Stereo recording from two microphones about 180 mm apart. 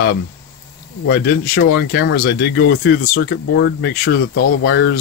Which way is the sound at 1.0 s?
65° left (ahead or behind).